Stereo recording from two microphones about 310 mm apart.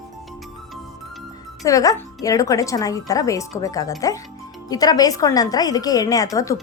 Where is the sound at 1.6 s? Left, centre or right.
Centre.